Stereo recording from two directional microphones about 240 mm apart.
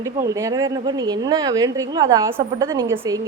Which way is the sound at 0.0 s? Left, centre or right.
Centre.